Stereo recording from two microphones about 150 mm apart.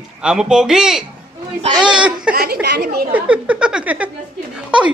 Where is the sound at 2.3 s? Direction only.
90° right.